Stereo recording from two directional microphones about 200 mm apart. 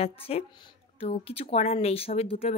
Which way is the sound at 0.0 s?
30° left (ahead or behind).